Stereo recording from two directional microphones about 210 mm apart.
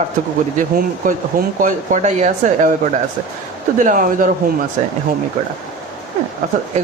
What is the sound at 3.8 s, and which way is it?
Speech, 40° right (ahead or behind).